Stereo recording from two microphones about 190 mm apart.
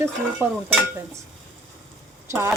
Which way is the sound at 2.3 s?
15° right (ahead or behind).